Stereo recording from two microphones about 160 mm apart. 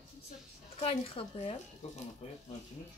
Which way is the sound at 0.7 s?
40° left (ahead or behind).